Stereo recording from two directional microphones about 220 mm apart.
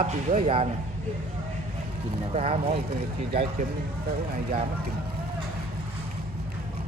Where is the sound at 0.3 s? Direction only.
30° right (ahead or behind).